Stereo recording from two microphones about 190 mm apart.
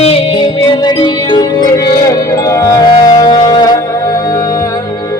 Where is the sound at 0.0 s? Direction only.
30° left (ahead or behind).